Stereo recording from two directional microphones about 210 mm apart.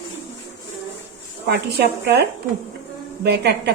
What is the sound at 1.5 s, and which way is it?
Speech, 50° right (ahead or behind).